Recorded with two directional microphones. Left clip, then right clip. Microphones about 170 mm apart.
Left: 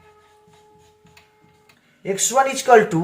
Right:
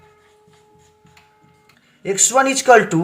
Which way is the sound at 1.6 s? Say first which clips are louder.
Right 2 dB; 40° right (ahead or behind).